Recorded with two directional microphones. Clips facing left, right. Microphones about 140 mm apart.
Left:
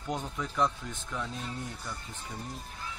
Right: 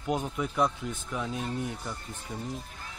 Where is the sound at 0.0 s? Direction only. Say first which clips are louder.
Right 5 dB; 10° right (ahead or behind).